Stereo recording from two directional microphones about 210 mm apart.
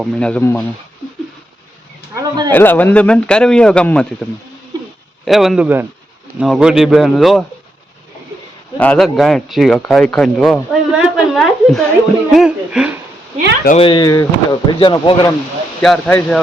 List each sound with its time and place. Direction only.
0.0 s speech: 5° left (ahead or behind)
2.1 s speech: 20° right (ahead or behind)
2.5 s speech: 10° left (ahead or behind)
8.8 s speech: 5° left (ahead or behind)
13.7 s speech: 25° left (ahead or behind)
15.8 s speech: 5° left (ahead or behind)